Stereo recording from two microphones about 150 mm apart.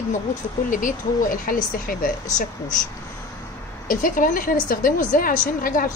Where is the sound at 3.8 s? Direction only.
65° left (ahead or behind).